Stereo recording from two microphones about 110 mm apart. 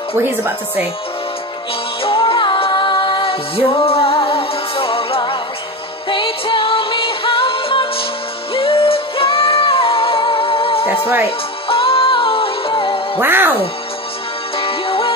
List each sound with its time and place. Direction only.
0.2 s speech: 20° right (ahead or behind)
2.0 s music: 50° left (ahead or behind)
13.2 s speech: 20° right (ahead or behind)
14.6 s music: 55° left (ahead or behind)